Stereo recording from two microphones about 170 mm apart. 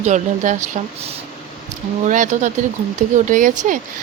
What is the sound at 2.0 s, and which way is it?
A woman's voice, 45° right (ahead or behind).